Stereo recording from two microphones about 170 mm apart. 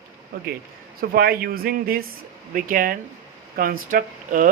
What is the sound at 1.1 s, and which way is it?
Speech, 65° right (ahead or behind).